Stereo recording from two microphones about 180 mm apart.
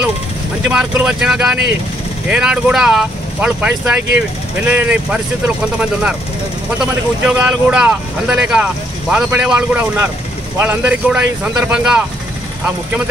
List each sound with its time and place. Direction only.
0.7 s speech: 5° right (ahead or behind)